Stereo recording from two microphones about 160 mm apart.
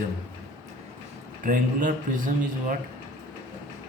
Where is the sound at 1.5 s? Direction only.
55° right (ahead or behind).